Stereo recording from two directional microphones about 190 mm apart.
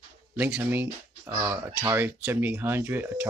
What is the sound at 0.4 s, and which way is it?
Speech, 10° right (ahead or behind).